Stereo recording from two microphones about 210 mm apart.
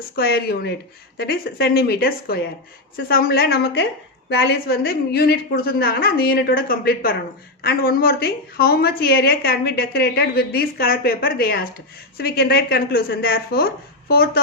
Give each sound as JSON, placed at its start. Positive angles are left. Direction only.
{"t": 0.2, "sound": "a woman's voice", "side_deg": 50}